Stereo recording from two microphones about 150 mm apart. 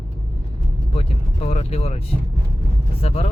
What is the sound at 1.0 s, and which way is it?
Speech, 45° left (ahead or behind).